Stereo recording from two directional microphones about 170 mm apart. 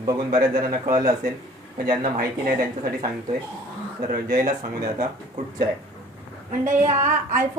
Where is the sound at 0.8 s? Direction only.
55° right (ahead or behind).